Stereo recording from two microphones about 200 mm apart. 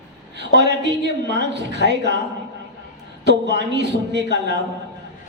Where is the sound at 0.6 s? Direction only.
60° right (ahead or behind).